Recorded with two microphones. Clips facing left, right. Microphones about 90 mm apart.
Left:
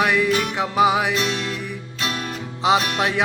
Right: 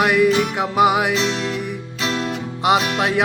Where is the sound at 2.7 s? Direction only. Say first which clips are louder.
Right 1 dB; 10° right (ahead or behind).